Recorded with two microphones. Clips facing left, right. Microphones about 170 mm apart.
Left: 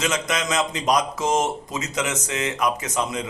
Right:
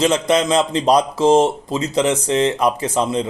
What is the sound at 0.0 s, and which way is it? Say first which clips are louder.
Speech: right 9 dB; 30° right (ahead or behind).